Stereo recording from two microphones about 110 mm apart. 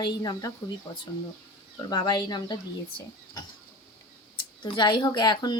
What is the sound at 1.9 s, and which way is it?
Speech, 40° left (ahead or behind).